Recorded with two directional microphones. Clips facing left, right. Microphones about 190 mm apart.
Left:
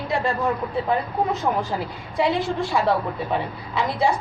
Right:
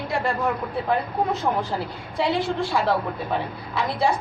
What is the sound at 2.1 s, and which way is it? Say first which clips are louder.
A woman's voice: left 1 dB; 15° left (ahead or behind).